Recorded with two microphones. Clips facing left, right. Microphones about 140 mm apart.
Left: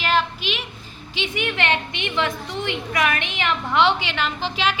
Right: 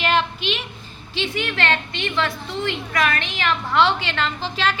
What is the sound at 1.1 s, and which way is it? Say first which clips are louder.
A woman's voice: even; 15° left (ahead or behind).